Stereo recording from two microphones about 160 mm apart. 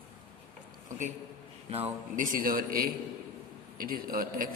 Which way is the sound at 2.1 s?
55° right (ahead or behind).